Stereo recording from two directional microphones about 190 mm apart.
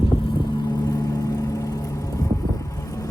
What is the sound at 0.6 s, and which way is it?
Vehicle, 20° left (ahead or behind).